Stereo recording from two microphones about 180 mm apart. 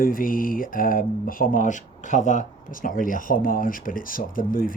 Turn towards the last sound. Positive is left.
turn(degrees=50)  # may be behind; listen again after turning